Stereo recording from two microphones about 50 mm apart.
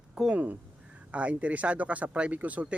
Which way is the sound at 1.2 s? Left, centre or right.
Right.